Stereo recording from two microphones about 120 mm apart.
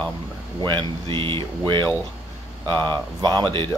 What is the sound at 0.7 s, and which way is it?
Speech, 45° right (ahead or behind).